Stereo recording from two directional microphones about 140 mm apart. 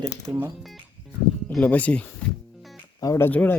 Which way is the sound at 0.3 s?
20° right (ahead or behind).